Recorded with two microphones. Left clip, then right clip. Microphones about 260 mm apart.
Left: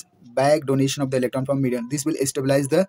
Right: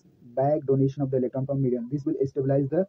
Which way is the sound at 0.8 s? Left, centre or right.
Left.